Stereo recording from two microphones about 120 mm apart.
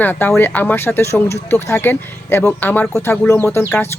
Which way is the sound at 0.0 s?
15° left (ahead or behind).